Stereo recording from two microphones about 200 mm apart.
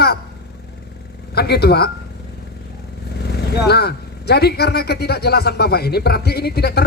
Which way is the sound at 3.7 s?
55° left (ahead or behind).